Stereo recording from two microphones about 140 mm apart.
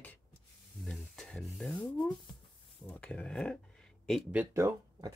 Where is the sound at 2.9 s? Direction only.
10° left (ahead or behind).